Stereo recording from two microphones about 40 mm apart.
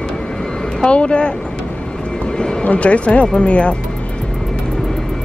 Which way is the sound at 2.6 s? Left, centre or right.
Left.